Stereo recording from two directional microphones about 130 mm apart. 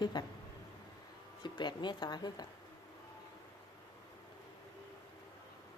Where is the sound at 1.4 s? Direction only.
35° left (ahead or behind).